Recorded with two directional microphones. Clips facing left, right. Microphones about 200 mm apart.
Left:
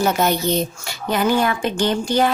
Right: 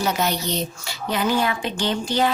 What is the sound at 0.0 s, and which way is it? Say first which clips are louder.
A woman's voice: left 5 dB; 50° left (ahead or behind).